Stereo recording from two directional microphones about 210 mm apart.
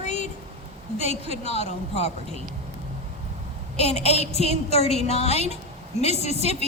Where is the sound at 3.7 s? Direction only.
30° left (ahead or behind).